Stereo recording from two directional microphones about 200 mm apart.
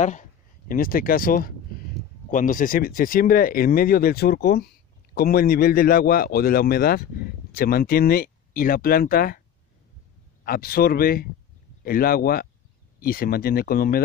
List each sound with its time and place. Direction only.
0.0 s speech: 40° left (ahead or behind)
10.4 s speech: 45° left (ahead or behind)